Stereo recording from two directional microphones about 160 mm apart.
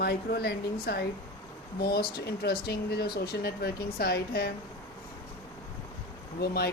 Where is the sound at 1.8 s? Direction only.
75° left (ahead or behind).